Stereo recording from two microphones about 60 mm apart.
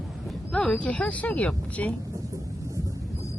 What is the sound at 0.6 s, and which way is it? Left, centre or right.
Speech, centre.